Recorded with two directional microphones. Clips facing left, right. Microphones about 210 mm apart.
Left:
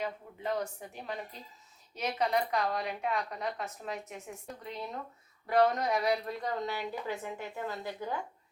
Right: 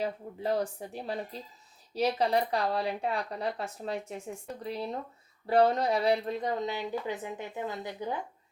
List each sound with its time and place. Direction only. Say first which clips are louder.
0.0 s a woman's voice: right 4 dB; 35° right (ahead or behind); by 8.2 s 20° right (ahead or behind)